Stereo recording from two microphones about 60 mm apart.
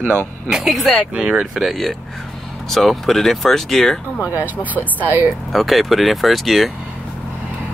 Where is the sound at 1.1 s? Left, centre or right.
Centre.